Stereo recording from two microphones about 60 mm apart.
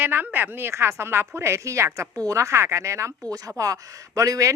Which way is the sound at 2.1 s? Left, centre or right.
Right.